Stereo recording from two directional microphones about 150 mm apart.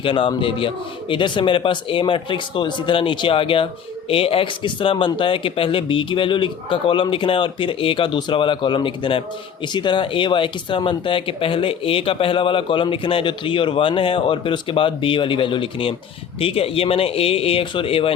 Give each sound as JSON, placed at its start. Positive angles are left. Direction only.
{"t": 0.0, "sound": "speech", "side_deg": 35}